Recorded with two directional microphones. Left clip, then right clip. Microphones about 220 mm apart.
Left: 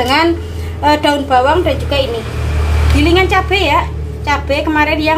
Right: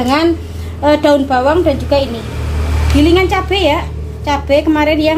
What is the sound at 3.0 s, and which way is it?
A woman's voice, 20° right (ahead or behind).